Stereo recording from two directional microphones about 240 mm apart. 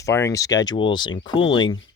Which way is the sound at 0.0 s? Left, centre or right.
Centre.